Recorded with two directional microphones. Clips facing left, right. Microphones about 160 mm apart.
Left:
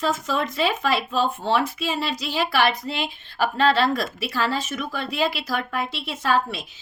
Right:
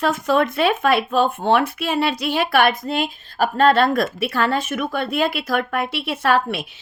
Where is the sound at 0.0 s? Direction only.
60° right (ahead or behind).